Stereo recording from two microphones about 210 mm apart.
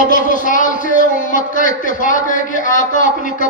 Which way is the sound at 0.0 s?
40° left (ahead or behind).